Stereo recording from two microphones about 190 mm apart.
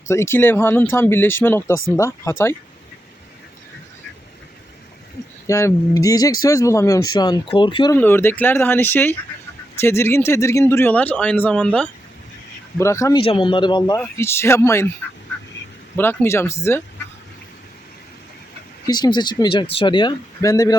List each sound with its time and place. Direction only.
0.1 s a man's voice: 15° left (ahead or behind)
5.5 s speech: 15° left (ahead or behind)
7.9 s a man's voice: 10° left (ahead or behind)
12.8 s a man's voice: 15° left (ahead or behind)
14.0 s a man's voice: 15° left (ahead or behind)
16.0 s a man's voice: 10° left (ahead or behind)
18.9 s speech: 20° left (ahead or behind)